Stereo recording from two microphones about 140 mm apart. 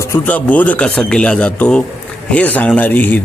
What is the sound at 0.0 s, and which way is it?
Speech, 15° left (ahead or behind).